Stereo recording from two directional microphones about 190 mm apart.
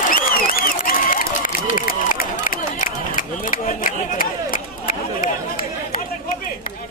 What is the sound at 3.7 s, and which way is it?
Chatter, 45° left (ahead or behind).